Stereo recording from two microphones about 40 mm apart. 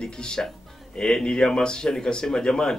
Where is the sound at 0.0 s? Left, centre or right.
Centre.